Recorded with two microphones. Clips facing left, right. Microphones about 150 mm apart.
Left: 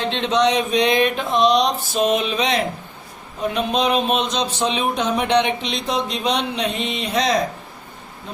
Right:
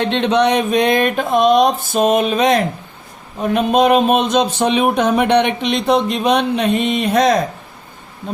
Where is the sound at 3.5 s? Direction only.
55° right (ahead or behind).